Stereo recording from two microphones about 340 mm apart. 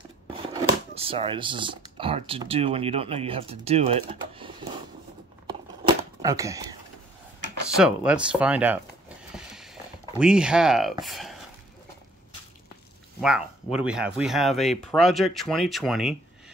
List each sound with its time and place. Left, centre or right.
0.9 s speech: centre
5.5 s a sound: centre
7.7 s speech: centre
9.3 s mechanisms: centre
10.1 s speech: centre
13.2 s speech: centre